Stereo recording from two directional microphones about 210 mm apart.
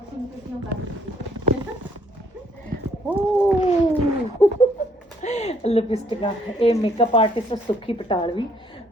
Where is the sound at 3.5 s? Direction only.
30° left (ahead or behind).